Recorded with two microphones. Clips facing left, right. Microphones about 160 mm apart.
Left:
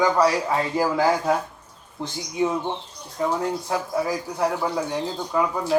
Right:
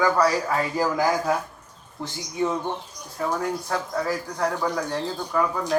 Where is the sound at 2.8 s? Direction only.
10° right (ahead or behind).